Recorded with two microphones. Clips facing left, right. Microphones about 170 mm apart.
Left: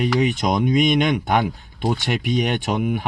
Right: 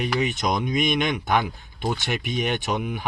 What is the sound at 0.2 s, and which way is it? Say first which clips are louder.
Speech: left 5 dB; 55° left (ahead or behind).